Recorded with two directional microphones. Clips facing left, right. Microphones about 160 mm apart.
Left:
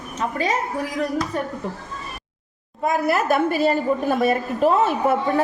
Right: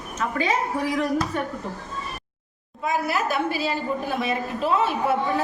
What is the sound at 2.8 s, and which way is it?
A woman's voice, 50° left (ahead or behind).